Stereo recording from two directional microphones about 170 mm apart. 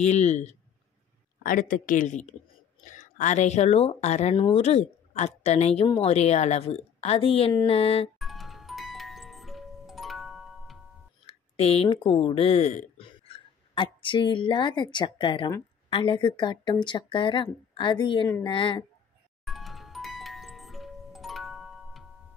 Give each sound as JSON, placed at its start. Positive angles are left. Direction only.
{"t": 0.0, "sound": "a woman's voice", "side_deg": 40}
{"t": 1.4, "sound": "a woman's voice", "side_deg": 55}
{"t": 8.2, "sound": "music", "side_deg": 0}
{"t": 11.2, "sound": "a woman's voice", "side_deg": 35}
{"t": 19.4, "sound": "music", "side_deg": 0}